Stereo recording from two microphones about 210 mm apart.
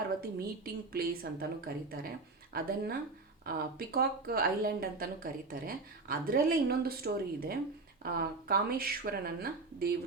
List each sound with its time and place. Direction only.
0.2 s speech: 45° right (ahead or behind)